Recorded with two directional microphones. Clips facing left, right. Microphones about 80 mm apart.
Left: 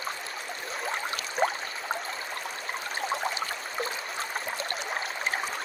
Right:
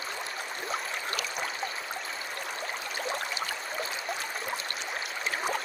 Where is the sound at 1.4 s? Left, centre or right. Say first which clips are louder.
Left 9 dB; left.